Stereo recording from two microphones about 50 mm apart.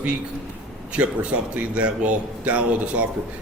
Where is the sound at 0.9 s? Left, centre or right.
Right.